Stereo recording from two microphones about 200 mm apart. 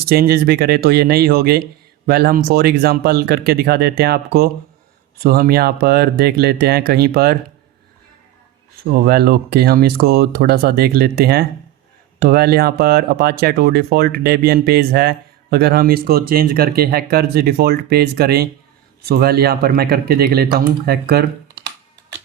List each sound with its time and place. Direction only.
0.1 s speech: 50° right (ahead or behind)
8.9 s speech: 50° right (ahead or behind)